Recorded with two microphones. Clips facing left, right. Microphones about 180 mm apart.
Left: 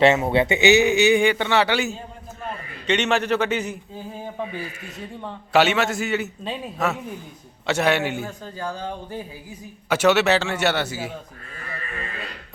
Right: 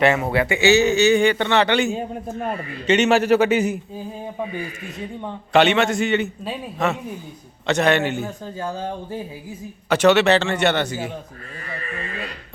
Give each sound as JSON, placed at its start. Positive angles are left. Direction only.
{"t": 0.0, "sound": "speech", "side_deg": 25}
{"t": 2.0, "sound": "a man's voice", "side_deg": -55}
{"t": 2.8, "sound": "a man's voice", "side_deg": -5}
{"t": 5.5, "sound": "a man's voice", "side_deg": 5}
{"t": 7.7, "sound": "speech", "side_deg": 10}
{"t": 9.9, "sound": "speech", "side_deg": 5}